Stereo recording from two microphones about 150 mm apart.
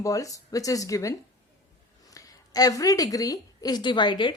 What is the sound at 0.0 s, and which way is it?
A woman's voice, 20° left (ahead or behind).